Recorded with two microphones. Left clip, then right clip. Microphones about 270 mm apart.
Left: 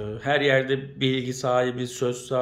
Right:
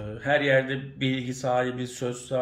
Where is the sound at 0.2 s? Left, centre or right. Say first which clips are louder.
Left 1 dB; centre.